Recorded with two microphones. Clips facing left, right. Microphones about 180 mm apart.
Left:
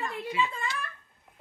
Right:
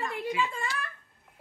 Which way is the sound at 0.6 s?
Centre (ahead or behind).